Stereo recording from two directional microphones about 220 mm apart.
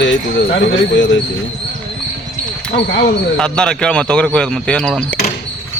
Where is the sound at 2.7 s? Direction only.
50° left (ahead or behind).